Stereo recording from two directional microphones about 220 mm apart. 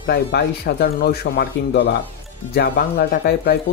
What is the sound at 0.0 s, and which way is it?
Speech, 45° left (ahead or behind).